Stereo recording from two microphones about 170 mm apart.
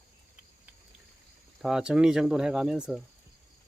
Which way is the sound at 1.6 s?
5° right (ahead or behind).